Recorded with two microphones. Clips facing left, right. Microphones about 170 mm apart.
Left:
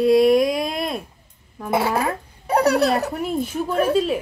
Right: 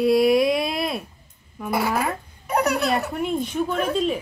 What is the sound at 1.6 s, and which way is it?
A child's voice, 25° left (ahead or behind).